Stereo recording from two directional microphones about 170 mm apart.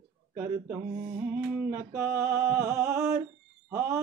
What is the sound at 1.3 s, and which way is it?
Mantra, 15° right (ahead or behind).